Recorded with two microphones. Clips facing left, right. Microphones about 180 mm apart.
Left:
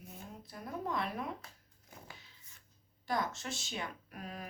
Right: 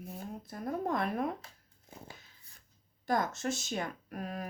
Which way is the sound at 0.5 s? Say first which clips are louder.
Right 5 dB; 50° right (ahead or behind).